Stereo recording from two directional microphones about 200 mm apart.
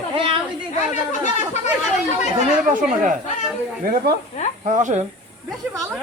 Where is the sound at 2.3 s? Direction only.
40° right (ahead or behind).